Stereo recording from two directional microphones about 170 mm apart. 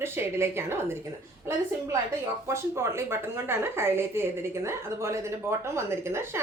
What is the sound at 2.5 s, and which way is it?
A woman's voice, 15° right (ahead or behind).